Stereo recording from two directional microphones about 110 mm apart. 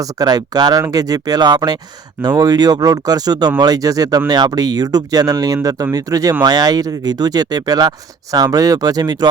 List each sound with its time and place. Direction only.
0.0 s speech: 35° right (ahead or behind)